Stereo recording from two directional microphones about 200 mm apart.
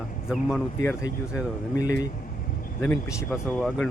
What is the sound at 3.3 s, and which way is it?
Speech, centre (ahead or behind).